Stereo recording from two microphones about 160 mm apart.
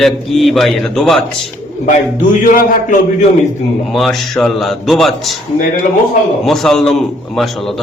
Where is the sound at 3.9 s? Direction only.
Centre (ahead or behind).